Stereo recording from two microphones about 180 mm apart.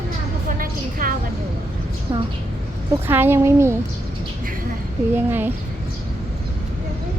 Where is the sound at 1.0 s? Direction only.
50° right (ahead or behind).